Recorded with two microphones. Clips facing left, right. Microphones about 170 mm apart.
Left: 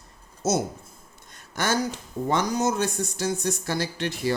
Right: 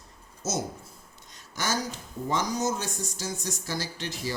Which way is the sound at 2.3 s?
60° left (ahead or behind).